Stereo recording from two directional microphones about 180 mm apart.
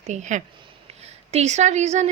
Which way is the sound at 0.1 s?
40° right (ahead or behind).